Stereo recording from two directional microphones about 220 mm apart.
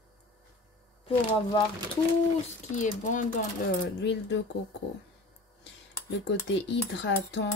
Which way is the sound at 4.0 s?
55° left (ahead or behind).